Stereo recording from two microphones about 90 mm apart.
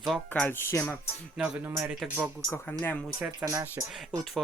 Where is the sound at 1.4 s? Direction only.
5° right (ahead or behind).